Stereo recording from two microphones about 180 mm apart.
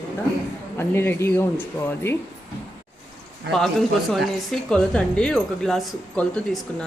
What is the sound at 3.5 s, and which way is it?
A woman's voice, centre (ahead or behind).